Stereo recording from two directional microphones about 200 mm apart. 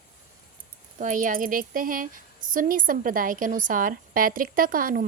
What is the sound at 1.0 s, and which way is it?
Speech, 40° right (ahead or behind).